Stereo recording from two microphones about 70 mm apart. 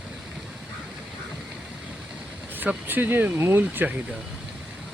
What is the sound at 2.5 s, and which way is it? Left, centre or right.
Speech, right.